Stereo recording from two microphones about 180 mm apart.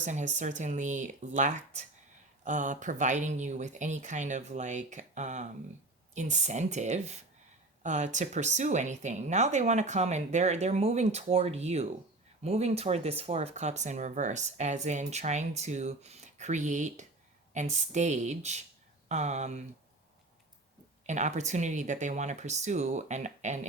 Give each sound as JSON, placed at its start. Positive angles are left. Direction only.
{"t": 0.0, "sound": "speech", "side_deg": -40}
{"t": 21.1, "sound": "speech", "side_deg": -40}